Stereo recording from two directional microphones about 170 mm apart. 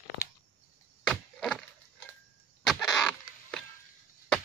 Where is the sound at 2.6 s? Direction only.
5° left (ahead or behind).